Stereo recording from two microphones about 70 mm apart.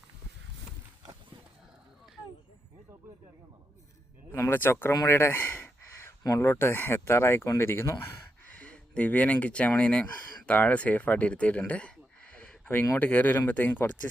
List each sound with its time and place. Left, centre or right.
4.3 s speech: left
4.9 s a sound: left
6.4 s speech: left
8.5 s speech: centre